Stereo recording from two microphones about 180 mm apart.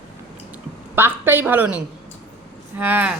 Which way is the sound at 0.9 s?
10° right (ahead or behind).